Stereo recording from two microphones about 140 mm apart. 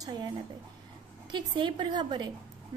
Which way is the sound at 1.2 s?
35° right (ahead or behind).